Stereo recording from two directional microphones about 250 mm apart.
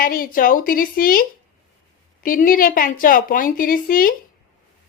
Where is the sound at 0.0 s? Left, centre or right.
Left.